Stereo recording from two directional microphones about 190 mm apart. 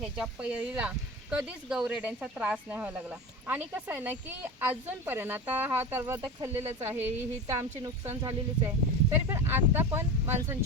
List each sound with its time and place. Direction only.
0.0 s speech: 5° right (ahead or behind)